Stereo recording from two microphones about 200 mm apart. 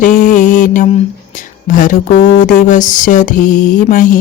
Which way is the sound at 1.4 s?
40° left (ahead or behind).